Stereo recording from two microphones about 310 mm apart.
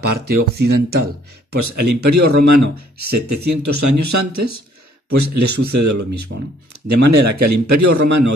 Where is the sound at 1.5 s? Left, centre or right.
Right.